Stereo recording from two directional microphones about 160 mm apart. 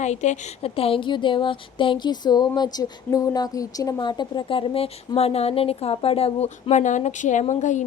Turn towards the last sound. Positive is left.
turn(degrees=50)  # may be behind; listen again after turning